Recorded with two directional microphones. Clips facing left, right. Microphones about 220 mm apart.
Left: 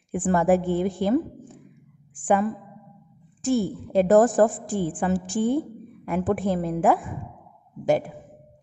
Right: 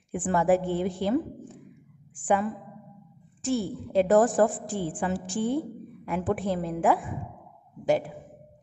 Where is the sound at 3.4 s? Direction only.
45° left (ahead or behind).